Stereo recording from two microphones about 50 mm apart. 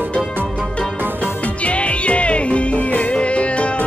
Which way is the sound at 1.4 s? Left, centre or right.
Left.